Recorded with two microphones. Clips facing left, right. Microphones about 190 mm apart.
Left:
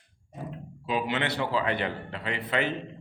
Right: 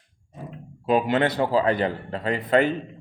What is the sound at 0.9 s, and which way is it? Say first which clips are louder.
A man's voice: right 8 dB; 50° right (ahead or behind).